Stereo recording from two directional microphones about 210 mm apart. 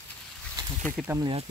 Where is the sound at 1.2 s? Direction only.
25° right (ahead or behind).